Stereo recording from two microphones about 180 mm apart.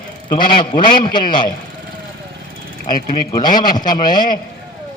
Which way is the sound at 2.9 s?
25° left (ahead or behind).